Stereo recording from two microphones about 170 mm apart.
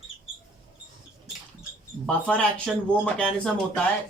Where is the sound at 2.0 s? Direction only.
5° left (ahead or behind).